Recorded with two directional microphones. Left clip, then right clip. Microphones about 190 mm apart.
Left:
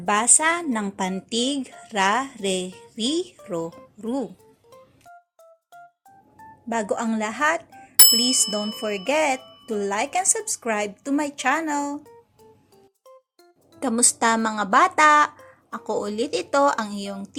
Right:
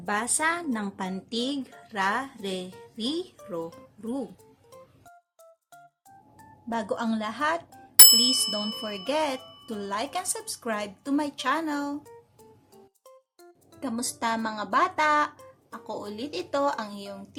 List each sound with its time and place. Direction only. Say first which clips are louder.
0.0 s a woman's voice: left 7 dB; 25° left (ahead or behind)
6.7 s a woman's voice: left 5 dB; 25° left (ahead or behind)
8.0 s bicycle bell: even; centre (ahead or behind)
8.8 s a woman's voice: left 8 dB; 25° left (ahead or behind)
13.7 s a woman's voice: left 10 dB; 35° left (ahead or behind)